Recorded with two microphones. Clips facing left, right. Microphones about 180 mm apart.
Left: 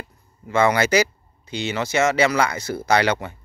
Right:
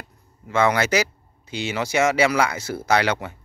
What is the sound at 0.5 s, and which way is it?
Speech, centre (ahead or behind).